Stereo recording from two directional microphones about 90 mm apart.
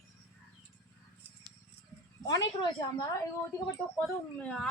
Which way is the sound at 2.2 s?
50° left (ahead or behind).